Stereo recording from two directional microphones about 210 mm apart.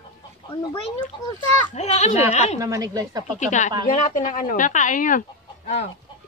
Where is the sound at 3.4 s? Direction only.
35° left (ahead or behind).